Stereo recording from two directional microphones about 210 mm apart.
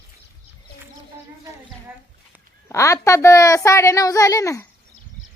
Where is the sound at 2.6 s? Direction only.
15° left (ahead or behind).